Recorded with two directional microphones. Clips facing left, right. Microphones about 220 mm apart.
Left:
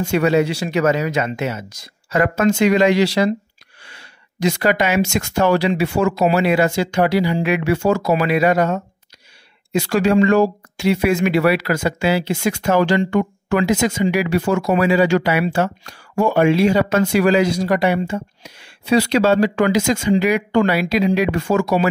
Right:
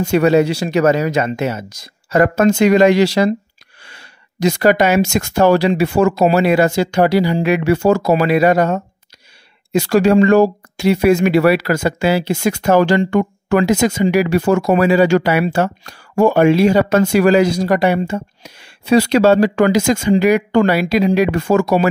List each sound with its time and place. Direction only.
0.0 s speech: 40° right (ahead or behind)